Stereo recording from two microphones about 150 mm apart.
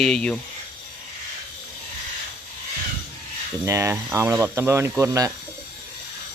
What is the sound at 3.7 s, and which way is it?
Speech, 20° right (ahead or behind).